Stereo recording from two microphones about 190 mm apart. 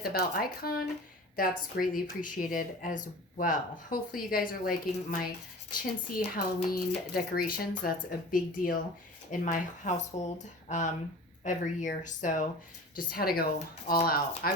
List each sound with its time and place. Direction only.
0.0 s speech: 55° left (ahead or behind)